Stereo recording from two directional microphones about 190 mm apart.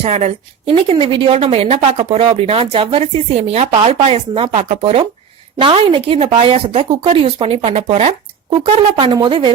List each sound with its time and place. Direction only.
0.0 s a woman's voice: 35° right (ahead or behind)